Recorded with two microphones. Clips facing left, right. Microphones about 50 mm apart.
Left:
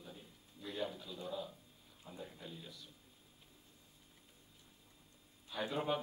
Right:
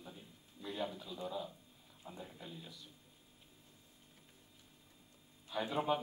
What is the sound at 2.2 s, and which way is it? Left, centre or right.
Speech, centre.